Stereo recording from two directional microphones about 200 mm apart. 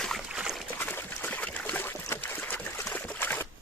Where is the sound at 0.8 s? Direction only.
10° left (ahead or behind).